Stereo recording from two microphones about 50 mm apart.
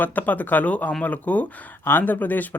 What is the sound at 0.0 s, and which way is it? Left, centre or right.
Speech, left.